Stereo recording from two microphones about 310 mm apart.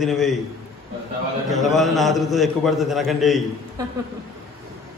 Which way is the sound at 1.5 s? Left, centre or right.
Centre.